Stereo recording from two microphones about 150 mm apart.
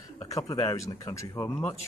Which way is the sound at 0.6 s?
20° left (ahead or behind).